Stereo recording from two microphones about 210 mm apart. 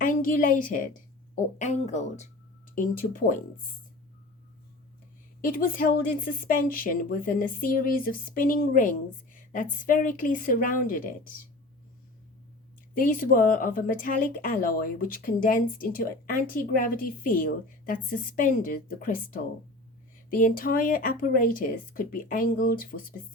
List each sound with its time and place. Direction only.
0.0 s a woman's voice: 40° left (ahead or behind)
5.4 s speech: 40° left (ahead or behind)
12.9 s speech: 40° left (ahead or behind)